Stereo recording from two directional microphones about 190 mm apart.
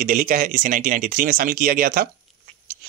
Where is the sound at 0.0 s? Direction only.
50° right (ahead or behind).